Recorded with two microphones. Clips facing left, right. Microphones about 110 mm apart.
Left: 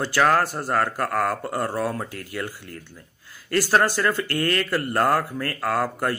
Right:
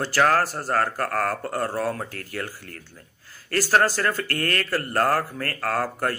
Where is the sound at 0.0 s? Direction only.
20° left (ahead or behind).